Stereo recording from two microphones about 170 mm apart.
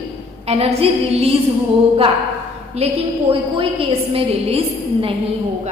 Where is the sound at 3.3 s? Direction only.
35° right (ahead or behind).